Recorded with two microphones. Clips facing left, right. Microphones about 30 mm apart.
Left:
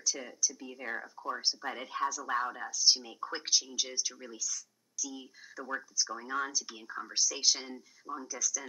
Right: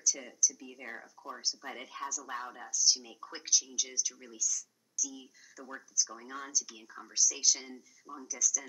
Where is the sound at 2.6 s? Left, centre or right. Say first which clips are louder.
Right 3 dB; left.